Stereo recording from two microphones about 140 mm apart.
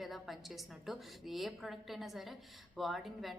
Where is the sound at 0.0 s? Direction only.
Centre (ahead or behind).